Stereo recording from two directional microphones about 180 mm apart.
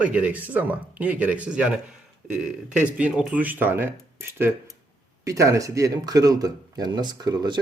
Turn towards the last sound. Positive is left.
turn(degrees=-25)  # may be behind; listen again after turning